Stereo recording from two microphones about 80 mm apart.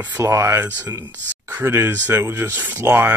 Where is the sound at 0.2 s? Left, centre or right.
Right.